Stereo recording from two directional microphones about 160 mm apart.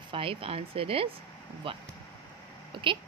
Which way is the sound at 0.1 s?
35° right (ahead or behind).